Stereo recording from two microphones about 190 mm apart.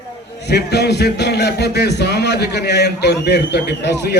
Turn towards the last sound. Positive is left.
turn(degrees=65)  # may be behind; listen again after turning